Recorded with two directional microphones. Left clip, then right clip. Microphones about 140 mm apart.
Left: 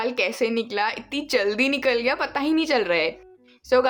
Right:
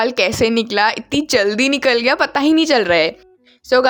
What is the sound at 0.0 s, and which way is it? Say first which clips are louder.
Speech: right 8 dB; 60° right (ahead or behind).